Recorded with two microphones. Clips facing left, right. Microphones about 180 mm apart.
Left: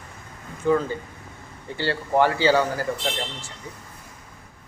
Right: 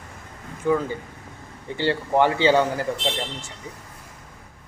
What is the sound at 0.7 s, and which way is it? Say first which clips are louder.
Speech: left 1 dB; 15° right (ahead or behind).